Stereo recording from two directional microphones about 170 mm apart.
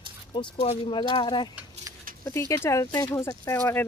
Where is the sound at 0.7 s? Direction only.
30° left (ahead or behind).